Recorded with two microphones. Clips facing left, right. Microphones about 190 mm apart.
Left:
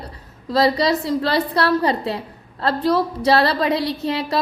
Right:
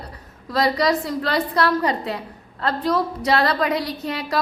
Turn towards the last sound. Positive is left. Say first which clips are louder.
# left 3 dB
turn(degrees=25)  # may be behind; listen again after turning